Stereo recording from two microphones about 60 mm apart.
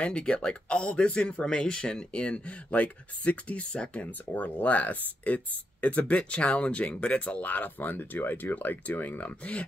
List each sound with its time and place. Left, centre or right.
0.0 s speech: centre
7.4 s speech: left